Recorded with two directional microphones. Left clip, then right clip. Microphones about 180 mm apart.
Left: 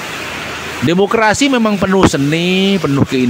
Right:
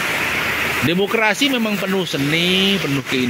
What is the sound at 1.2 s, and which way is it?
Speech, 35° left (ahead or behind).